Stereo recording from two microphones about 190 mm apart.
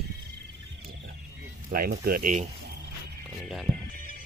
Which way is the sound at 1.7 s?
50° right (ahead or behind).